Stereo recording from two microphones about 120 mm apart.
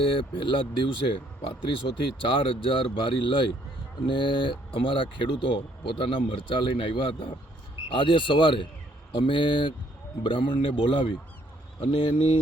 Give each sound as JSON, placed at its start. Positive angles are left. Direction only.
{"t": 0.0, "sound": "speech", "side_deg": 45}